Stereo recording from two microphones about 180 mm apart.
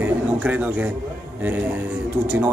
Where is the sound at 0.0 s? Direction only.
10° right (ahead or behind).